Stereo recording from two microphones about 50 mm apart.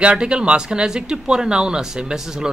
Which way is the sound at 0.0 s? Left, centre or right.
Centre.